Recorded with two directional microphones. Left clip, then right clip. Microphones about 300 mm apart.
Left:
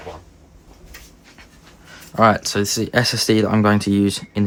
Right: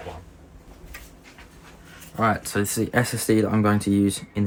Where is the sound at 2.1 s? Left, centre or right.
Centre.